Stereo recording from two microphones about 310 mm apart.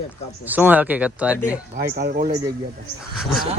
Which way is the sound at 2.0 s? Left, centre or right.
Right.